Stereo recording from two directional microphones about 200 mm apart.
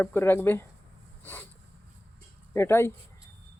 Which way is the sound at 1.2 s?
10° left (ahead or behind).